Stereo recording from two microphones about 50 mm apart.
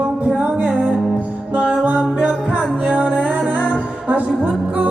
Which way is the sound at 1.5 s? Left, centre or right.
Right.